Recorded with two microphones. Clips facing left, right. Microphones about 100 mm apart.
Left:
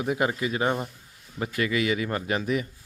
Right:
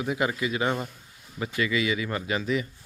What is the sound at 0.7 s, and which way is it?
Speech, 15° left (ahead or behind).